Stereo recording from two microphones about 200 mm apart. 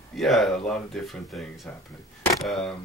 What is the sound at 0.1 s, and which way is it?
Speech, centre (ahead or behind).